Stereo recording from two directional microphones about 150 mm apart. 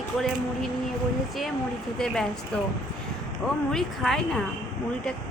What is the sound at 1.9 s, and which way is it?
Speech, 5° left (ahead or behind).